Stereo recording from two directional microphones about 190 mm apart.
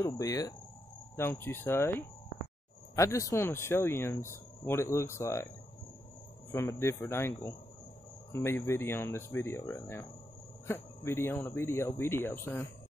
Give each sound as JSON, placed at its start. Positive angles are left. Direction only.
{"t": 0.0, "sound": "speech", "side_deg": 20}
{"t": 6.5, "sound": "speech", "side_deg": 15}